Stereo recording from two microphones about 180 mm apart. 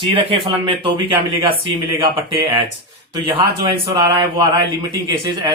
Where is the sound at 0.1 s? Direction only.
30° right (ahead or behind).